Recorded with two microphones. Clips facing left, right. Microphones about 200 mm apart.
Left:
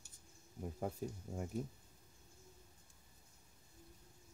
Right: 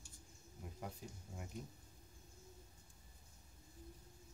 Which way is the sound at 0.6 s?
45° left (ahead or behind).